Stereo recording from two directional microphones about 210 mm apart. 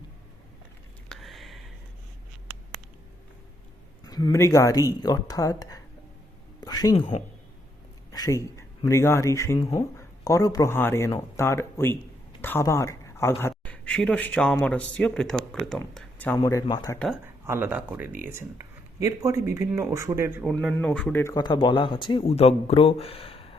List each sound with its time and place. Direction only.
1.1 s a sound: centre (ahead or behind)
4.0 s speech: 20° left (ahead or behind)
8.1 s speech: 15° left (ahead or behind)
17.4 s speech: 10° right (ahead or behind)
20.4 s speech: centre (ahead or behind); by 23.6 s 25° left (ahead or behind)